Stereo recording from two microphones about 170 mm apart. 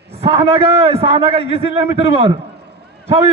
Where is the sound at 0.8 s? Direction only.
35° right (ahead or behind).